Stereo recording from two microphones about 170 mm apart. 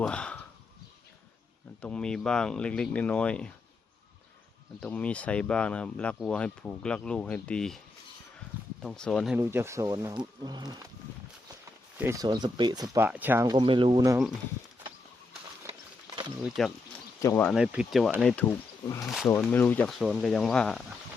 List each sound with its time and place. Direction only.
0.0 s speech: 5° left (ahead or behind)
1.8 s speech: 5° left (ahead or behind)
4.8 s speech: 5° left (ahead or behind)
8.8 s speech: 5° left (ahead or behind)
9.3 s speech: 15° right (ahead or behind)
11.9 s speech: 15° right (ahead or behind)
13.1 s speech: 10° right (ahead or behind)
13.5 s speech: 30° right (ahead or behind)
16.6 s speech: centre (ahead or behind)
17.2 s speech: 20° left (ahead or behind)
17.4 s speech: 5° right (ahead or behind)
19.3 s speech: 15° left (ahead or behind)